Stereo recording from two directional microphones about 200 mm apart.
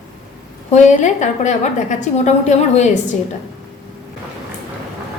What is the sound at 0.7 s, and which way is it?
A woman's voice, 35° left (ahead or behind).